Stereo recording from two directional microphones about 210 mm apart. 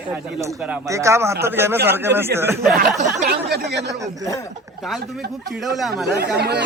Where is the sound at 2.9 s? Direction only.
40° right (ahead or behind).